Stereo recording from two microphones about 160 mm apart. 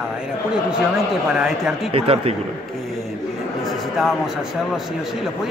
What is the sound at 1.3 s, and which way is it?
Speech, 5° right (ahead or behind).